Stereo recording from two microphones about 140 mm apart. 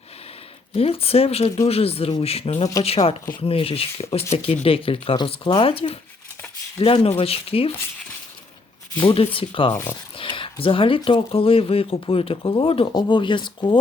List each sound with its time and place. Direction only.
0.8 s speech: 45° left (ahead or behind)
9.0 s speech: 40° left (ahead or behind)